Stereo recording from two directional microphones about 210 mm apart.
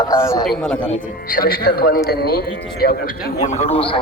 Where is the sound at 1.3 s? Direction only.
45° left (ahead or behind).